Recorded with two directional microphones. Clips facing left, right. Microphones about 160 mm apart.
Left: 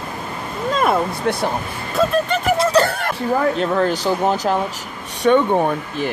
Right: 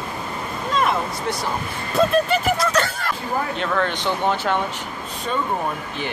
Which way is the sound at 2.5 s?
30° left (ahead or behind).